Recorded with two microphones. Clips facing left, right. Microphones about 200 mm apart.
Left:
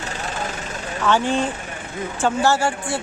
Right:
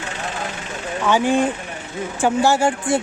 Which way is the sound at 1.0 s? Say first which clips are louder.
Right 3 dB; 10° right (ahead or behind).